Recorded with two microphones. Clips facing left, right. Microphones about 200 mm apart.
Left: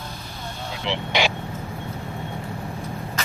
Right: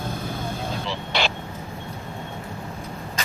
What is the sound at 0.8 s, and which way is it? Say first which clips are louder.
Vehicle: left 6 dB; 20° left (ahead or behind).